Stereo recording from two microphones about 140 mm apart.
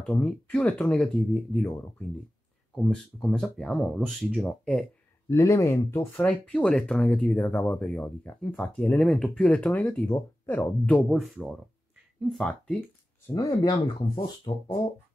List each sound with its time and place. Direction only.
0.0 s speech: 5° left (ahead or behind)
2.7 s speech: 5° left (ahead or behind)
5.3 s speech: 20° left (ahead or behind)
6.2 s speech: 5° left (ahead or behind)
13.3 s speech: 25° left (ahead or behind)